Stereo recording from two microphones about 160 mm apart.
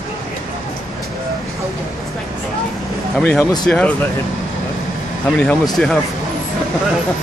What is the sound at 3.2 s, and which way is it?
Speech, 10° left (ahead or behind).